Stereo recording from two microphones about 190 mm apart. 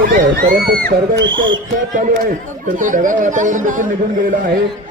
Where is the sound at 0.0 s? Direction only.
50° right (ahead or behind).